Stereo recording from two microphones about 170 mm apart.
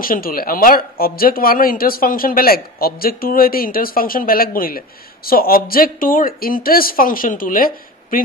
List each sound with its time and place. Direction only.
0.0 s speech: 60° left (ahead or behind)